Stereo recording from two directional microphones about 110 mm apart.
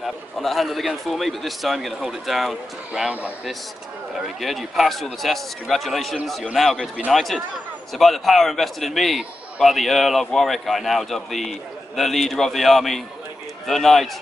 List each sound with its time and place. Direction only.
0.0 s a man's voice: centre (ahead or behind)
4.4 s a man's voice: centre (ahead or behind)